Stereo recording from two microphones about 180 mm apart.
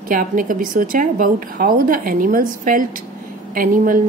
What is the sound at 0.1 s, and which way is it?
A woman's voice, 50° right (ahead or behind).